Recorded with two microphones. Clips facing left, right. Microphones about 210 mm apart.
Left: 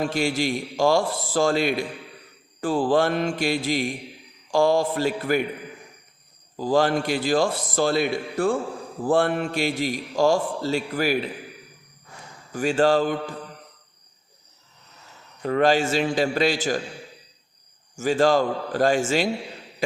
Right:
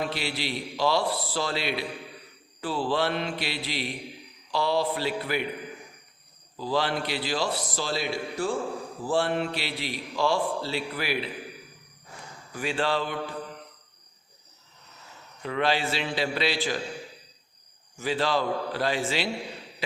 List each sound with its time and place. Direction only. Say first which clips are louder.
0.0 s a man's voice: left 7 dB; 45° left (ahead or behind)
6.6 s a man's voice: left 7 dB; 45° left (ahead or behind)
12.5 s a man's voice: left 8 dB; 45° left (ahead or behind)
15.4 s a man's voice: left 7 dB; 45° left (ahead or behind)
17.9 s a man's voice: left 7 dB; 45° left (ahead or behind)